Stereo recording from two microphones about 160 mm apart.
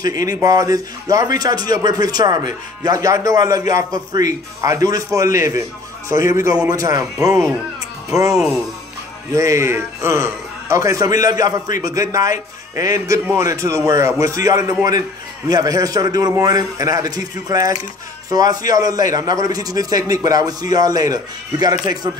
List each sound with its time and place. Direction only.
0.0 s a man's voice: 20° right (ahead or behind)
8.4 s speech: 5° right (ahead or behind)
9.3 s a man's voice: 20° right (ahead or behind)